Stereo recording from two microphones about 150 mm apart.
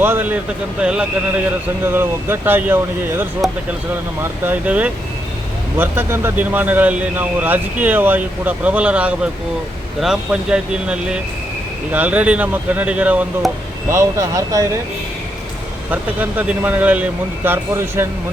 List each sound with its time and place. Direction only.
0.0 s a man's voice: 15° right (ahead or behind)
15.9 s a man's voice: 10° right (ahead or behind)